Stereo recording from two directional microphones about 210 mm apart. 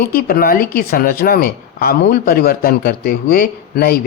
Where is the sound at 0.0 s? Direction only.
45° left (ahead or behind).